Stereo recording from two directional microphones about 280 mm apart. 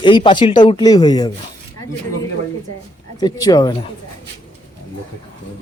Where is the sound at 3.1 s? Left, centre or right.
Centre.